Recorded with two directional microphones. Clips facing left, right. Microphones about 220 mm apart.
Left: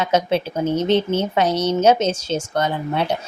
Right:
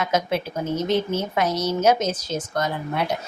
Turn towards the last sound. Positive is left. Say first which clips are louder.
# left 3 dB
turn(degrees=30)  # may be behind; listen again after turning